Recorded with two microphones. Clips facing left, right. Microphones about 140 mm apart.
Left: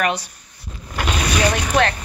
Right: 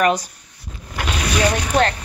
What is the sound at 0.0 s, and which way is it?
Speech, 45° right (ahead or behind).